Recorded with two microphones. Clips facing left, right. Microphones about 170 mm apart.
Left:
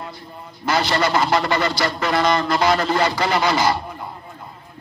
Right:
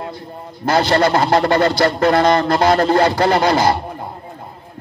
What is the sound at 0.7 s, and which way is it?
A man's voice, 55° right (ahead or behind).